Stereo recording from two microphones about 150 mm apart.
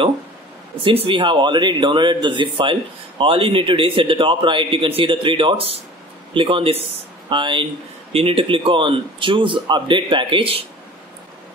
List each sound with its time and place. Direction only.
0.8 s a man's voice: 35° right (ahead or behind)